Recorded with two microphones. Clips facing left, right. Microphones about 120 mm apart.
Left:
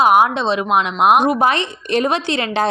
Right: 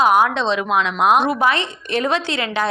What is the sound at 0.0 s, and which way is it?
Speech, 10° left (ahead or behind).